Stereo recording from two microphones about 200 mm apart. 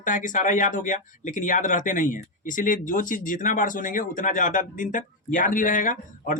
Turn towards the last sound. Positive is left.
turn(degrees=40)  # may be behind; listen again after turning